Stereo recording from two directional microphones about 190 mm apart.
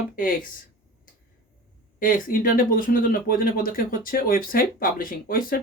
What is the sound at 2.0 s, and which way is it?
Speech, 45° left (ahead or behind).